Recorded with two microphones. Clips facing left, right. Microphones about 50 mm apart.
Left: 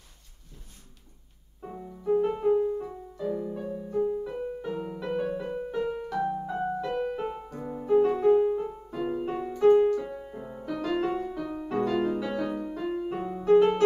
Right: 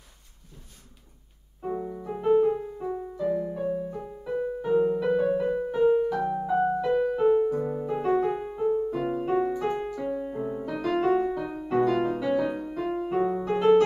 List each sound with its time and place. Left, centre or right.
1.7 s music: right
2.0 s music: centre
3.3 s music: centre
10.6 s music: centre